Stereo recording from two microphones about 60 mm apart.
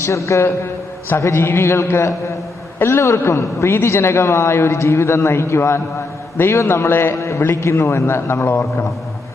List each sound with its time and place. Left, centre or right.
0.0 s a man's voice: left